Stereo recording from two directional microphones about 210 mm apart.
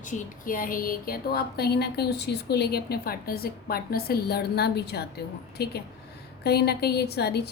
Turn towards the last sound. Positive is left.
turn(degrees=50)  # may be behind; listen again after turning